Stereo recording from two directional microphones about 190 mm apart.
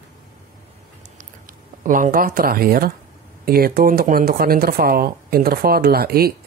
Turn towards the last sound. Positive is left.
turn(degrees=-55)  # may be behind; listen again after turning